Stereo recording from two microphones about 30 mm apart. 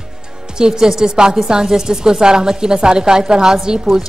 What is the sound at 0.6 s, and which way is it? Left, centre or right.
Speech, right.